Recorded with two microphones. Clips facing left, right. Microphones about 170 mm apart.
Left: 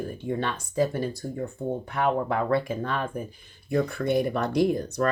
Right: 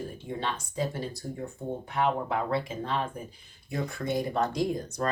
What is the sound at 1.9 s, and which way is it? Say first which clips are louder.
Speech: left 2 dB; 55° left (ahead or behind).